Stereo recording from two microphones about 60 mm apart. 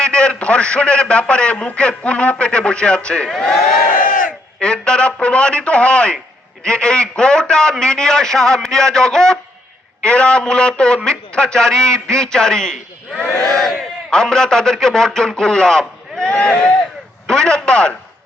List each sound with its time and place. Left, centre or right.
0.0 s a man's voice: centre
4.6 s a man's voice: centre